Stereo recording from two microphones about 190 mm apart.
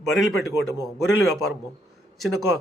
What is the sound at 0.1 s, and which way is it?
Speech, centre (ahead or behind).